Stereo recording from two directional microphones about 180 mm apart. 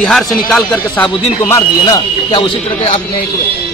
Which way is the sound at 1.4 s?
20° left (ahead or behind).